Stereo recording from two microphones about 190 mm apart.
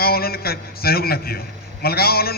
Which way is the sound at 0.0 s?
55° left (ahead or behind).